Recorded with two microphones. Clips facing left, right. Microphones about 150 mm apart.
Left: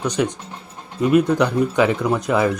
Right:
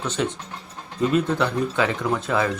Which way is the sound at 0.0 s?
15° left (ahead or behind).